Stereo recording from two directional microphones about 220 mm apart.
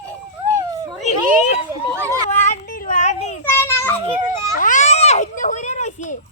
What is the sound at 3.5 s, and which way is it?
Children playing, 10° left (ahead or behind).